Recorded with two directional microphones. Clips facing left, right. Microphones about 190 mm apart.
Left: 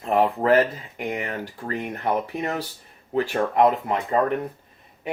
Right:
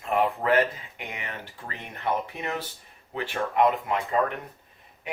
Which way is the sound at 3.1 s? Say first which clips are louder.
Left 5 dB; 40° left (ahead or behind).